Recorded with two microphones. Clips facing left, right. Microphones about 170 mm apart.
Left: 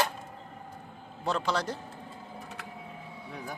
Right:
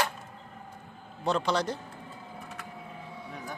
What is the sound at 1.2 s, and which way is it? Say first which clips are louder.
Speech: right 2 dB; centre (ahead or behind).